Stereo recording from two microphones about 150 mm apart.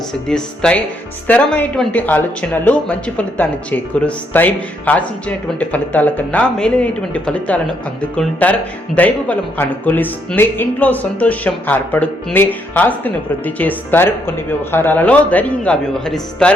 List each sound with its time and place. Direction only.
0.1 s speech: 5° left (ahead or behind)